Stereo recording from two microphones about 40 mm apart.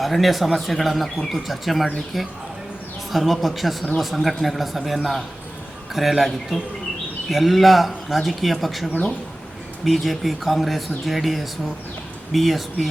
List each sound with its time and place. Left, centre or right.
0.0 s speech: centre